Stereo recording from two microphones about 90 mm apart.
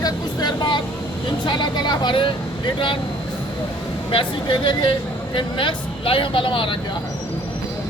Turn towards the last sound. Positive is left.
turn(degrees=75)  # may be behind; listen again after turning